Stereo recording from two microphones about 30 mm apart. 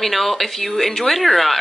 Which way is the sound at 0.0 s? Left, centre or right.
Centre.